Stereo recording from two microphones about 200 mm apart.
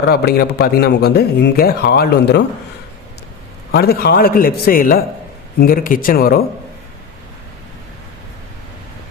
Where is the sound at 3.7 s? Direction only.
50° left (ahead or behind).